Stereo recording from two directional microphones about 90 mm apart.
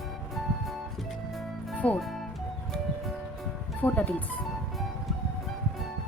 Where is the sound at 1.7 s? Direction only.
15° left (ahead or behind).